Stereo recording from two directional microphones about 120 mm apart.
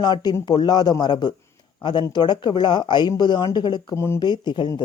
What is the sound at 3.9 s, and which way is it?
Speech, 20° left (ahead or behind).